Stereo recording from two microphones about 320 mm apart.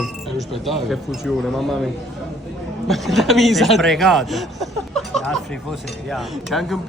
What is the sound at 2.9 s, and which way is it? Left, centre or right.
Speech, centre.